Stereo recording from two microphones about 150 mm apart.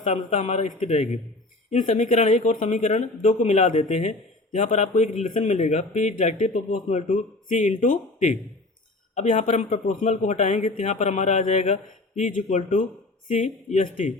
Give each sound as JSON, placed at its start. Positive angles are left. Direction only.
{"t": 0.0, "sound": "speech", "side_deg": 45}